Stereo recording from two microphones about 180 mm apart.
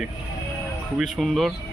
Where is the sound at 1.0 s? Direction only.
Centre (ahead or behind).